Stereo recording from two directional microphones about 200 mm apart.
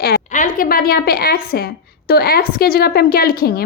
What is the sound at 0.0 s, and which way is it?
A woman's voice, 45° left (ahead or behind).